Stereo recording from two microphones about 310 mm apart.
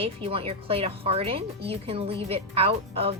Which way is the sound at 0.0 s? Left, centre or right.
Centre.